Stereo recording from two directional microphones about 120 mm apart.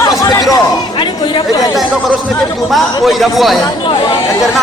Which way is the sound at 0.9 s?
40° left (ahead or behind).